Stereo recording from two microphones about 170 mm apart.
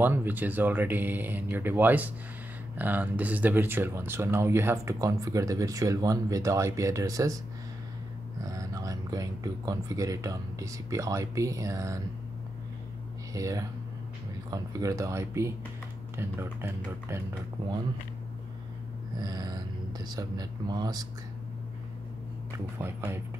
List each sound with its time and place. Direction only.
0.0 s speech: 10° right (ahead or behind)
8.5 s speech: 20° right (ahead or behind)
13.3 s speech: 20° right (ahead or behind)
19.1 s speech: 25° right (ahead or behind)
22.8 s speech: 15° right (ahead or behind)